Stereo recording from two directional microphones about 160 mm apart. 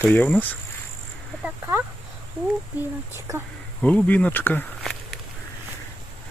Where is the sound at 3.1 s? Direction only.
20° right (ahead or behind).